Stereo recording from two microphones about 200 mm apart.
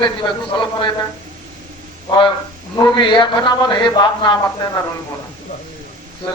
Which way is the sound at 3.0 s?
25° left (ahead or behind).